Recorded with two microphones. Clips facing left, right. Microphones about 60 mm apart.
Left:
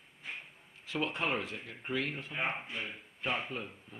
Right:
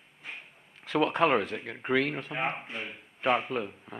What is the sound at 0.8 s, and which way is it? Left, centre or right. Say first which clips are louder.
Speech: right 9 dB; right.